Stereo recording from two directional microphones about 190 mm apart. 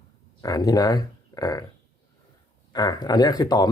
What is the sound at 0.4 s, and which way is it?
Speech, 20° left (ahead or behind).